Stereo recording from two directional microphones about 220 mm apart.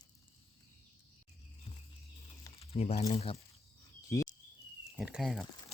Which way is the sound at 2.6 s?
30° left (ahead or behind).